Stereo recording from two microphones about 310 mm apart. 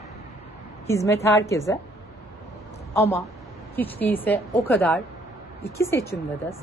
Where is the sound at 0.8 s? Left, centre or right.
Centre.